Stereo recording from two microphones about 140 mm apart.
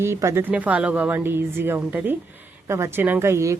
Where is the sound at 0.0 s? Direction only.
20° right (ahead or behind).